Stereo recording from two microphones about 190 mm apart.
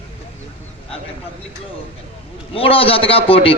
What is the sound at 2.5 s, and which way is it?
A man's voice, 30° left (ahead or behind).